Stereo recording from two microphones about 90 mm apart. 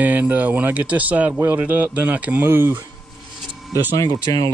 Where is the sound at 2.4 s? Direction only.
25° right (ahead or behind).